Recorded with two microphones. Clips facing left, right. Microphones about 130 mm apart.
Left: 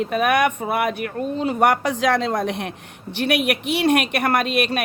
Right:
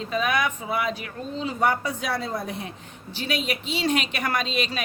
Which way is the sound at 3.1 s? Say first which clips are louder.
Left 8 dB; 65° left (ahead or behind).